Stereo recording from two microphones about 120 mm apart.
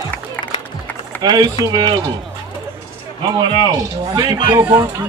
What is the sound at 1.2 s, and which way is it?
Speech, 35° right (ahead or behind).